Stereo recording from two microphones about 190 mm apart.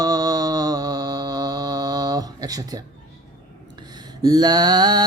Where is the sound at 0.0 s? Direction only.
20° right (ahead or behind).